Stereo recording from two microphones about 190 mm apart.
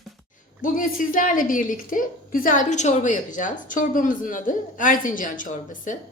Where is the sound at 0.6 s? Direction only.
45° left (ahead or behind).